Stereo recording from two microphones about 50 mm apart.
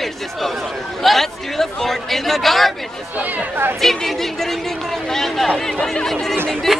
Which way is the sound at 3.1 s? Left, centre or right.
Right.